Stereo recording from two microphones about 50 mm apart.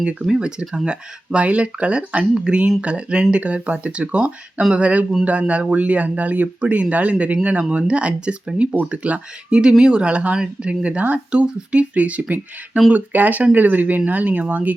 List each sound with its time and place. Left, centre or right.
0.0 s speech: centre
0.6 s speech: centre
0.9 s speech: right